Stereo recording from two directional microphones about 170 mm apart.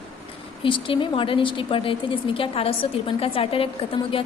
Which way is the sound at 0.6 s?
30° left (ahead or behind).